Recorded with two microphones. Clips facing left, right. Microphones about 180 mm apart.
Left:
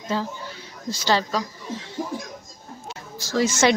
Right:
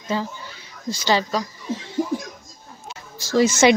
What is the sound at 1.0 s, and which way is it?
Speech, 15° right (ahead or behind).